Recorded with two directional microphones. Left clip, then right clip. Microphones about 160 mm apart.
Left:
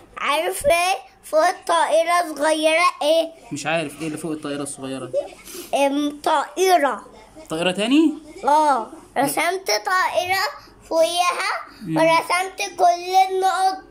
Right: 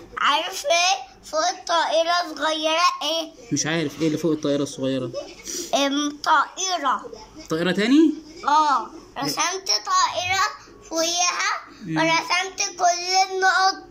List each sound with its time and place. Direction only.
0.1 s a woman's voice: 30° left (ahead or behind)
0.5 s a child's voice: 45° left (ahead or behind); by 3.3 s 30° left (ahead or behind)
3.5 s speech: centre (ahead or behind)
5.9 s a child's voice: 30° left (ahead or behind)
7.4 s speech: 10° left (ahead or behind)
8.4 s a child's voice: 40° left (ahead or behind)